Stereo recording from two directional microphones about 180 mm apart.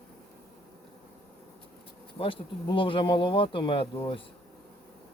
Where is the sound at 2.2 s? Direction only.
30° left (ahead or behind).